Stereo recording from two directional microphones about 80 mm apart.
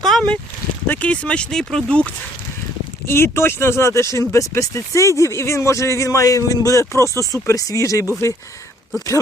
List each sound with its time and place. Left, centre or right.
0.0 s a sound: centre
0.9 s speech: centre
3.1 s speech: left